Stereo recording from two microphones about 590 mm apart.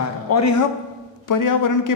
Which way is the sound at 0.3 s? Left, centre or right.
Left.